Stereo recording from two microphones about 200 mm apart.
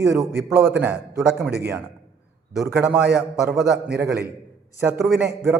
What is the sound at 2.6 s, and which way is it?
A man's voice, 5° right (ahead or behind).